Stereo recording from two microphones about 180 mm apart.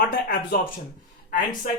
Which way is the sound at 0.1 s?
55° left (ahead or behind).